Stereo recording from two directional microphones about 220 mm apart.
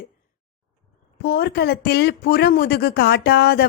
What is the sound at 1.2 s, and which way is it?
Speech, 45° left (ahead or behind).